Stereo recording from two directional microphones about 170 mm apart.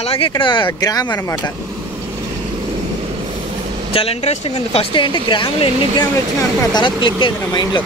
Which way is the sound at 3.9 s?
35° left (ahead or behind).